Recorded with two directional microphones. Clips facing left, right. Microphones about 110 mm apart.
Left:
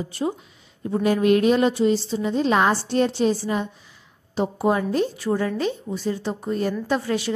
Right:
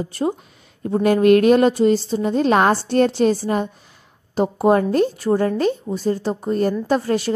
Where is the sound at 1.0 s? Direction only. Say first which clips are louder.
Right 5 dB; 55° right (ahead or behind).